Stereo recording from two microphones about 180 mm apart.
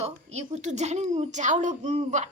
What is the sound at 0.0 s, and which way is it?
A woman's voice, 40° right (ahead or behind).